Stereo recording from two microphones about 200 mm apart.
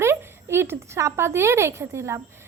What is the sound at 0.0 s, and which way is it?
A woman's voice, 15° right (ahead or behind).